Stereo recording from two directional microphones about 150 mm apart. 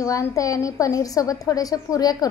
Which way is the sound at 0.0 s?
20° left (ahead or behind).